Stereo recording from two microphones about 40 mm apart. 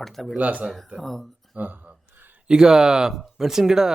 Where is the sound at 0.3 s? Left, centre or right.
Right.